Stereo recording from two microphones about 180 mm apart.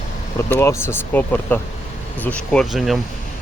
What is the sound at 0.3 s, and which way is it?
Speech, 15° left (ahead or behind).